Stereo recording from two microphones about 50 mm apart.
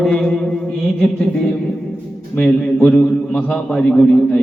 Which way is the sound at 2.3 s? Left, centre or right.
Centre.